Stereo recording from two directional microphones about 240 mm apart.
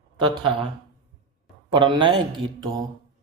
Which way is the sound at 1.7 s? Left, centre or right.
Centre.